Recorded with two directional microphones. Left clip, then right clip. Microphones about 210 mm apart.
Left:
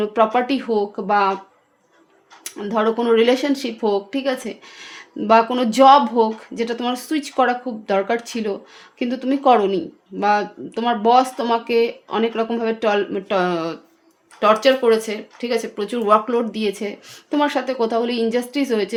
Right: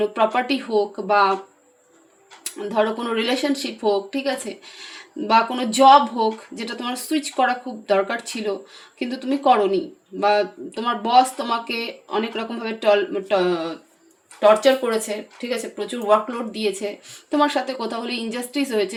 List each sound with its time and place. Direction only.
0.0 s speech: 45° left (ahead or behind)
2.4 s speech: 45° left (ahead or behind)